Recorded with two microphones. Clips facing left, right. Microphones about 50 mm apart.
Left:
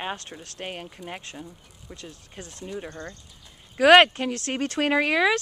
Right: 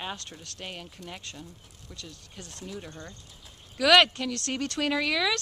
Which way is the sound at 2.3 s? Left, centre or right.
Centre.